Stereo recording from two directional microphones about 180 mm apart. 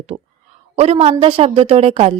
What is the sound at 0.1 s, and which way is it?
Speech, 35° right (ahead or behind).